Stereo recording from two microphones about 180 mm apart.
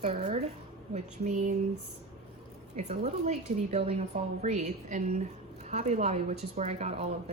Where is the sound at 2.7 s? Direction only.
40° right (ahead or behind).